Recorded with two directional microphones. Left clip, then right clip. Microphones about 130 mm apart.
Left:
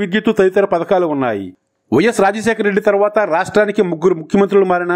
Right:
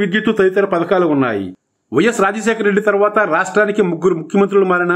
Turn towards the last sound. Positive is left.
turn(degrees=40)  # may be behind; listen again after turning